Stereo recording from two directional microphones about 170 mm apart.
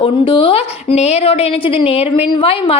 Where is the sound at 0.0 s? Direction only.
30° left (ahead or behind).